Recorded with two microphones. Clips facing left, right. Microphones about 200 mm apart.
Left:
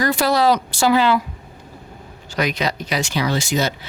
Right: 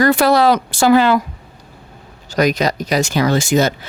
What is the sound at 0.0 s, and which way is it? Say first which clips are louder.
Speech: right 5 dB; 60° right (ahead or behind).